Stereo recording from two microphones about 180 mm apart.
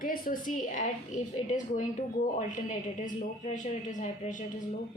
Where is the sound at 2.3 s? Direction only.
45° left (ahead or behind).